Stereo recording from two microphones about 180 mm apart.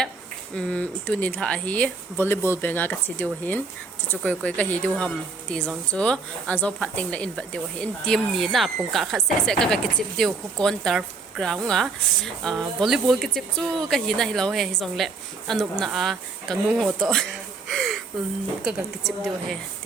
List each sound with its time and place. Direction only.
0.5 s speech: 5° left (ahead or behind)
17.7 s a sound: centre (ahead or behind)
18.6 s speech: centre (ahead or behind)